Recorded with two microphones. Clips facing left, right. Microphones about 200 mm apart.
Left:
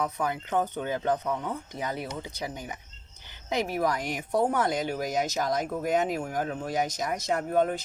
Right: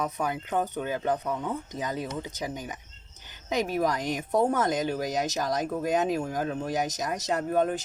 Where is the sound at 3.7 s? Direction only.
15° right (ahead or behind).